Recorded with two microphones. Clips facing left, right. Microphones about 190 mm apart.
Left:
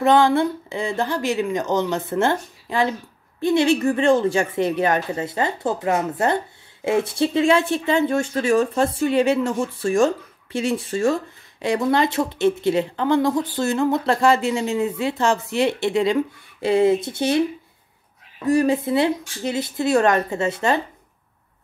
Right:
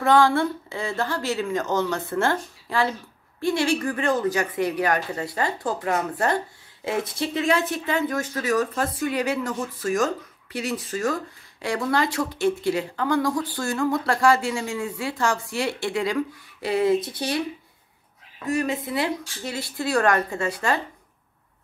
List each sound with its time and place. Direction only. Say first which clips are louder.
0.0 s a woman's voice: left 3 dB; 20° left (ahead or behind)
18.5 s a woman's voice: left 7 dB; 30° left (ahead or behind)